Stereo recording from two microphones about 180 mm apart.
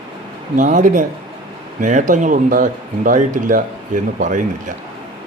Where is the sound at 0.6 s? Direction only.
45° right (ahead or behind).